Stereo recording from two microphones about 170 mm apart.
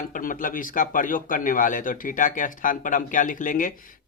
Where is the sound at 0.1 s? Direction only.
50° left (ahead or behind).